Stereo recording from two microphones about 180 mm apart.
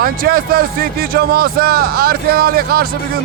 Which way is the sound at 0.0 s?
55° right (ahead or behind).